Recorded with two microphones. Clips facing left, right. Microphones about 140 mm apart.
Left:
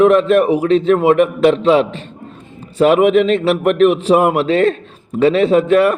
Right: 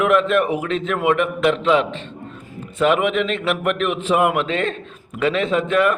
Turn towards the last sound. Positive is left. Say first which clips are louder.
# left 6 dB
turn(degrees=40)  # may be behind; listen again after turning